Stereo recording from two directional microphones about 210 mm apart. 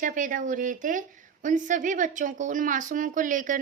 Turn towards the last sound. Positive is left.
turn(degrees=-40)  # may be behind; listen again after turning